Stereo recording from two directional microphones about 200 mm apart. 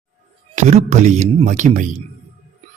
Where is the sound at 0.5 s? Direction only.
35° right (ahead or behind).